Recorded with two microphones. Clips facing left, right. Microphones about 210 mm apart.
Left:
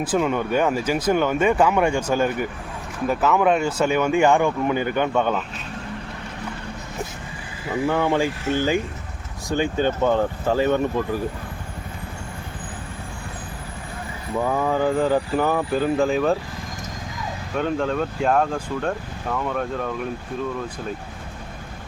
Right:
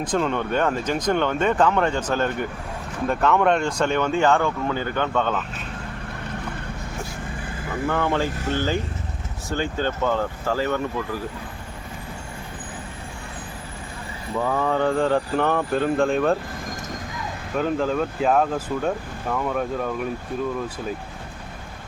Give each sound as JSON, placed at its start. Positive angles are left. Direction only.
{"t": 0.0, "sound": "speech", "side_deg": 5}
{"t": 7.9, "sound": "speech", "side_deg": 10}
{"t": 14.4, "sound": "speech", "side_deg": 10}
{"t": 17.5, "sound": "speech", "side_deg": 0}